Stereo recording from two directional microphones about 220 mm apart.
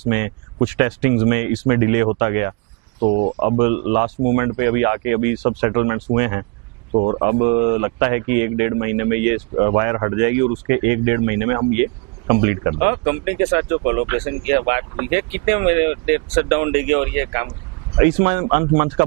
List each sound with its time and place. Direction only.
0.1 s speech: 15° right (ahead or behind)
3.0 s speech: 30° right (ahead or behind); by 9.4 s 15° right (ahead or behind)
9.6 s speech: 25° right (ahead or behind)